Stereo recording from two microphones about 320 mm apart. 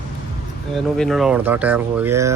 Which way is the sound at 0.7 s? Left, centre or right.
Centre.